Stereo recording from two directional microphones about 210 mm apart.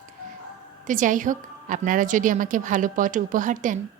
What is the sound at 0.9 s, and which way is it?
A woman's voice, 40° right (ahead or behind).